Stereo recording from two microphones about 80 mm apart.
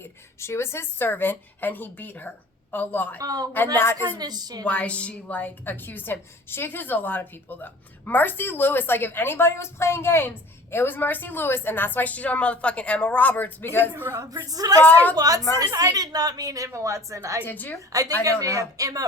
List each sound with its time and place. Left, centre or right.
0.0 s a woman's voice: left
3.2 s a woman's voice: right
3.8 s a woman's voice: left
4.2 s a woman's voice: right
4.6 s a woman's voice: centre
13.9 s a woman's voice: right
14.3 s a woman's voice: right
16.6 s speech: right
17.4 s a woman's voice: left
18.2 s a woman's voice: right